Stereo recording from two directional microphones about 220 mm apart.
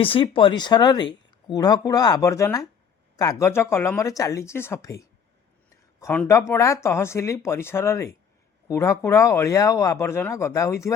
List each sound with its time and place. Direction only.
0.0 s speech: 25° left (ahead or behind)